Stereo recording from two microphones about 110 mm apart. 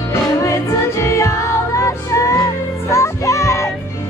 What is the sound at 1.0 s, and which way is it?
Music, 30° left (ahead or behind).